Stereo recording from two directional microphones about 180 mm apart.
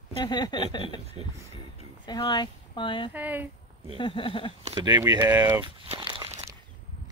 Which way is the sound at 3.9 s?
30° left (ahead or behind).